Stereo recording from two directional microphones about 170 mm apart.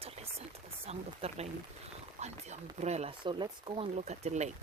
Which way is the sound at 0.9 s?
40° right (ahead or behind).